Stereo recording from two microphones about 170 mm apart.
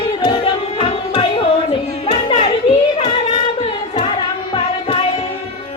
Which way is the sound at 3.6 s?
30° left (ahead or behind).